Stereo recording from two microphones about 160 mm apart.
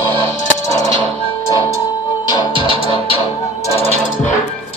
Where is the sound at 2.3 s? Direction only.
30° left (ahead or behind).